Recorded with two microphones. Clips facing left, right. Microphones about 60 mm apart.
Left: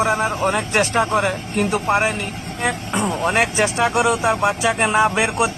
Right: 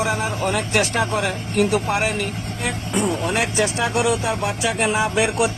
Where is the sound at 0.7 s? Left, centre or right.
Left.